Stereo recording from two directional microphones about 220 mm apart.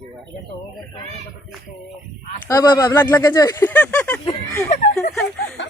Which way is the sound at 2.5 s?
15° left (ahead or behind).